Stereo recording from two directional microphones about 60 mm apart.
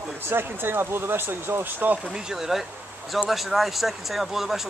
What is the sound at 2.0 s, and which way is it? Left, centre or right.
Speech, centre.